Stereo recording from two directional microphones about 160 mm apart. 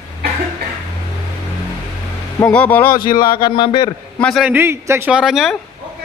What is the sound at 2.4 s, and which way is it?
Speech, 10° left (ahead or behind).